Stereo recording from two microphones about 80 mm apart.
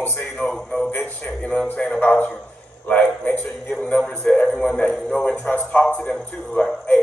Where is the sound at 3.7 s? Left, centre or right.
Centre.